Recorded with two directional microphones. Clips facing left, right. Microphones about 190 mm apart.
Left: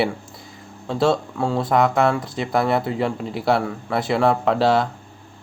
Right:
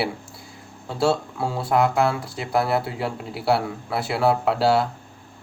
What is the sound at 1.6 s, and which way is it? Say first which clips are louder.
Speech: left 1 dB; centre (ahead or behind).